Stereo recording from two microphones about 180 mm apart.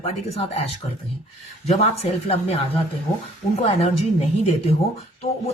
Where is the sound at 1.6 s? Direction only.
35° left (ahead or behind).